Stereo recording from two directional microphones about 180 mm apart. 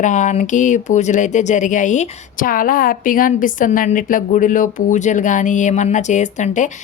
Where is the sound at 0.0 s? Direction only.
45° left (ahead or behind).